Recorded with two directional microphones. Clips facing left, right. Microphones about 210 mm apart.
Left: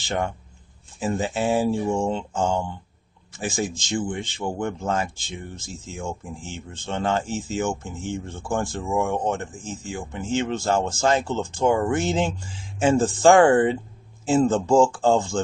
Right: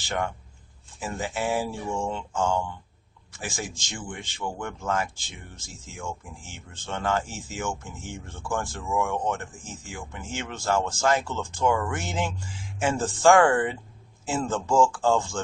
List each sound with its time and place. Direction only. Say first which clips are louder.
0.9 s speech: left 6 dB; 25° left (ahead or behind)